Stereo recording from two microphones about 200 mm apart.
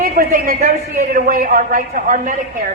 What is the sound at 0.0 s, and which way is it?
A man's voice, 45° right (ahead or behind).